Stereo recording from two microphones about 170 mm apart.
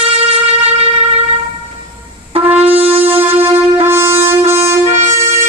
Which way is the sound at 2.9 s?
10° right (ahead or behind).